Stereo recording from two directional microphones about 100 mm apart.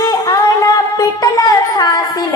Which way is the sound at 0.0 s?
35° left (ahead or behind).